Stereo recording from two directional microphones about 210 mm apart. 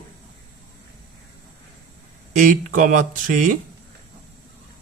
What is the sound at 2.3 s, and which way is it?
Speech, 40° right (ahead or behind).